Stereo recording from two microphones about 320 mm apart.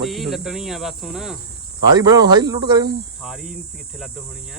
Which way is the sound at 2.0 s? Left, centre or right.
Centre.